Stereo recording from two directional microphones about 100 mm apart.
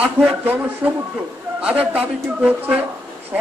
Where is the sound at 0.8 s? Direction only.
10° right (ahead or behind).